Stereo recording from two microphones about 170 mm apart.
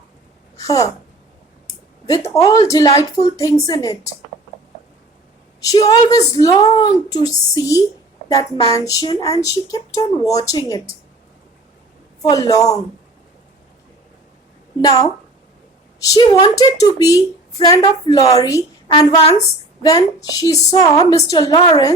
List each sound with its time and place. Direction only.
0.6 s speech: 20° left (ahead or behind)
2.0 s a woman's voice: 20° left (ahead or behind)
5.6 s a woman's voice: 20° left (ahead or behind)
12.3 s a woman's voice: 20° left (ahead or behind)
14.8 s a woman's voice: 20° left (ahead or behind)
19.2 s a woman's voice: 40° left (ahead or behind)
19.8 s a woman's voice: 20° left (ahead or behind)